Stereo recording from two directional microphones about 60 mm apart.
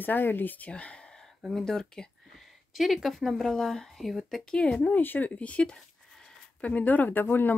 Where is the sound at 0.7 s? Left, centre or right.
Centre.